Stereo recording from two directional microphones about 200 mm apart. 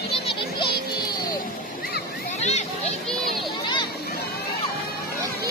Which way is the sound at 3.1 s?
Centre (ahead or behind).